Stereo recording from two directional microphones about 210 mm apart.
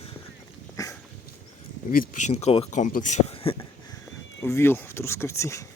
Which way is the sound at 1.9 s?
40° left (ahead or behind).